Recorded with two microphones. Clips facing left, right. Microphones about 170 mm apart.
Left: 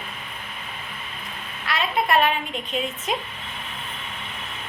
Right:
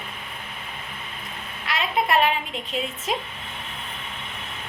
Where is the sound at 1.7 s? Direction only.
20° right (ahead or behind).